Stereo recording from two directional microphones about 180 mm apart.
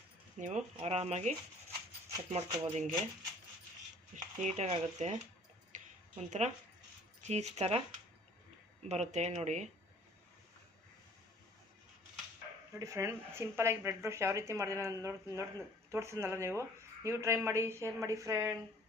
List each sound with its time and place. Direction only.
0.3 s speech: 40° right (ahead or behind)
4.1 s speech: 40° right (ahead or behind)
5.7 s a sound: 40° right (ahead or behind)
7.2 s speech: 40° right (ahead or behind)
8.9 s speech: 40° right (ahead or behind)
12.8 s speech: 15° right (ahead or behind)